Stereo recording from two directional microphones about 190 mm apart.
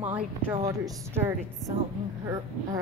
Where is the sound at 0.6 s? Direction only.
20° right (ahead or behind).